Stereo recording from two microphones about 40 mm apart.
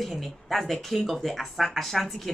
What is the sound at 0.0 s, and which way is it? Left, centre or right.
Speech, centre.